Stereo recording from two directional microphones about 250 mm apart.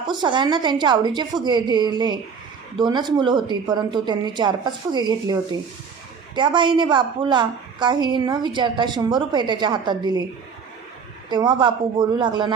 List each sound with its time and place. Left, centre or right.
0.1 s a woman's voice: centre
11.3 s a woman's voice: centre